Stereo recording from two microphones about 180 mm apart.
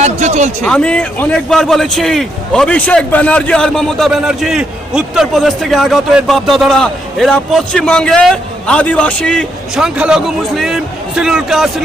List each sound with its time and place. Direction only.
0.0 s a man's voice: 40° right (ahead or behind)
0.6 s a man's voice: 5° left (ahead or behind)